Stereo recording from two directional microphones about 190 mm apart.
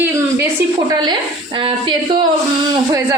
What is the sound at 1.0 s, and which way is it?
A woman's voice, 25° right (ahead or behind).